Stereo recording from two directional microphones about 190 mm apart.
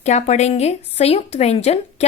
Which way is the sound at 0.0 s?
35° left (ahead or behind).